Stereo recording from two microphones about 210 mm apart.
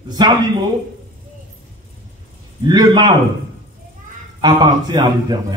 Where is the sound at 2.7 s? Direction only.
20° right (ahead or behind).